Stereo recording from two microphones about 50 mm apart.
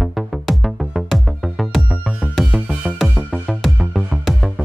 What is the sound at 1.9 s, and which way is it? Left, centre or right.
Music, centre.